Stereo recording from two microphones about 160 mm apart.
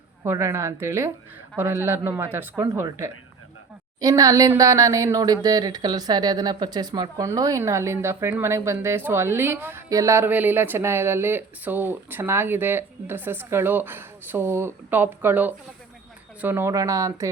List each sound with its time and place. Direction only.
0.3 s speech: 20° right (ahead or behind)